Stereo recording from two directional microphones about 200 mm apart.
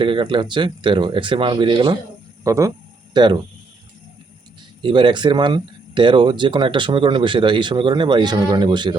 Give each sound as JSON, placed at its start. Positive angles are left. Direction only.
{"t": 0.0, "sound": "speech", "side_deg": -25}
{"t": 2.4, "sound": "a sound", "side_deg": -15}
{"t": 4.8, "sound": "speech", "side_deg": -25}